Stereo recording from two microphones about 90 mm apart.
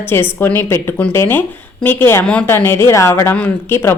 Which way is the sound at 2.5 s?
25° left (ahead or behind).